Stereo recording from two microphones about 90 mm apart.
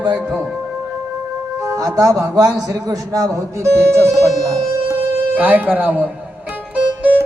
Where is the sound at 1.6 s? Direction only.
40° right (ahead or behind); by 6.1 s 20° right (ahead or behind).